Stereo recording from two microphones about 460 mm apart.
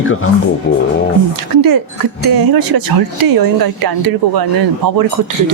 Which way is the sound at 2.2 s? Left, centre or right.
Right.